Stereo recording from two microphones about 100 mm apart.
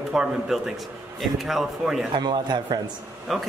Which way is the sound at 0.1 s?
5° right (ahead or behind).